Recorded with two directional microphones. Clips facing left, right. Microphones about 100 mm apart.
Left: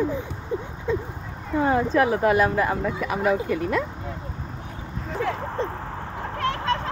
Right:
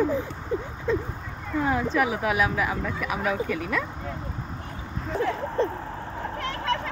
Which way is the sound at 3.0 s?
30° left (ahead or behind).